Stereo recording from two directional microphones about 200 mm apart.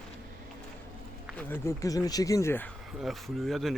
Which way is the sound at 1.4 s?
10° left (ahead or behind).